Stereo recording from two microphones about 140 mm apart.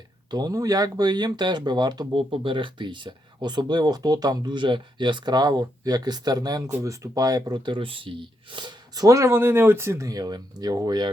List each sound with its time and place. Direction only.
0.3 s speech: 25° right (ahead or behind)